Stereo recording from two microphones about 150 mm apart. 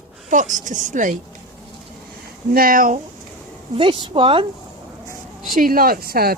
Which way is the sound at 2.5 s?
80° right.